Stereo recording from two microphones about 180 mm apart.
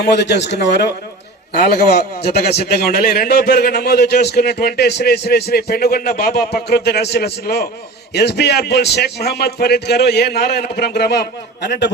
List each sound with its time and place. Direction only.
0.0 s a man's voice: 70° left (ahead or behind)